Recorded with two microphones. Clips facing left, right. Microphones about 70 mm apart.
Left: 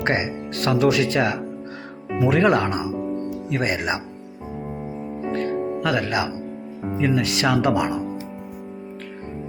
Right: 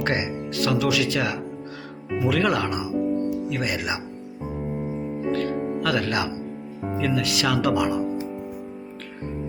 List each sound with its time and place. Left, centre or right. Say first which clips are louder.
0.0 s speech: left 2 dB; left
0.5 s speech: left 4 dB; left
5.3 s music: left 2 dB; left
7.0 s speech: left 3 dB; left